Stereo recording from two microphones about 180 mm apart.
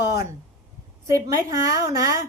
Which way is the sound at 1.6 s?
15° right (ahead or behind).